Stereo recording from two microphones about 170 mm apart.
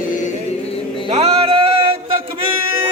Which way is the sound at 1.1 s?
35° right (ahead or behind).